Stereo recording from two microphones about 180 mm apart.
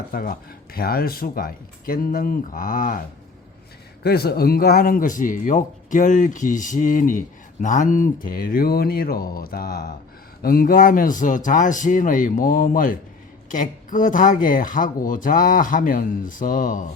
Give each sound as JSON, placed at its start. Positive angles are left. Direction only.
{"t": 0.1, "sound": "speech", "side_deg": 55}
{"t": 4.0, "sound": "speech", "side_deg": 60}